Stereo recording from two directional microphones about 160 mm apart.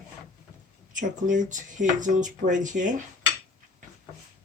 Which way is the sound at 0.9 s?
55° right (ahead or behind).